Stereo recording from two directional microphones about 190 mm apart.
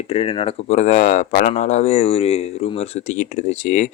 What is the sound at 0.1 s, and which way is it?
Speech, 30° left (ahead or behind).